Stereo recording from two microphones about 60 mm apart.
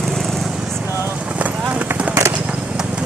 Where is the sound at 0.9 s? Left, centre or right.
Right.